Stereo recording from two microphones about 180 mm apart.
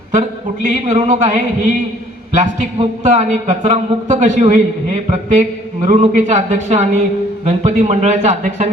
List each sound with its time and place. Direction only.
0.1 s a man's voice: 45° right (ahead or behind)
2.3 s a man's voice: 45° right (ahead or behind)